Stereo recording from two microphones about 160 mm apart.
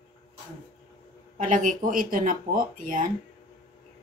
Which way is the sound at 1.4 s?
55° right (ahead or behind).